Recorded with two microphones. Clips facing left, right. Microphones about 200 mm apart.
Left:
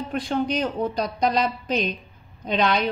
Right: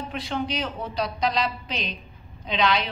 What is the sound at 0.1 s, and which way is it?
A woman's voice, 45° left (ahead or behind).